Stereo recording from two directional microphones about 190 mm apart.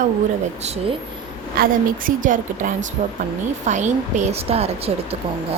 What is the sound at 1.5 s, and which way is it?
A woman's voice, 50° right (ahead or behind).